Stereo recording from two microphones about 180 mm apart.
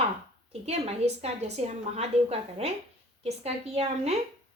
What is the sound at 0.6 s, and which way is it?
A woman's voice, 35° right (ahead or behind).